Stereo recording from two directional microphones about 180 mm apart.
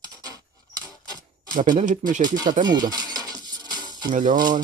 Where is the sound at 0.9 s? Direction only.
25° right (ahead or behind).